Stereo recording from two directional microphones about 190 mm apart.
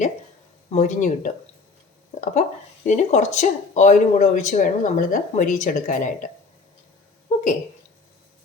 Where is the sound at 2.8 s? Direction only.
40° left (ahead or behind).